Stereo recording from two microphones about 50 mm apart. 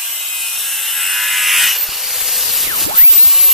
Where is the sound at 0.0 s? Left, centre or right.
Centre.